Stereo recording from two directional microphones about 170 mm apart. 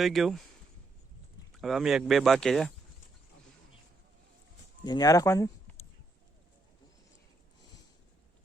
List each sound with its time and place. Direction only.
0.0 s speech: centre (ahead or behind)
1.5 s speech: centre (ahead or behind)
4.9 s speech: 20° left (ahead or behind)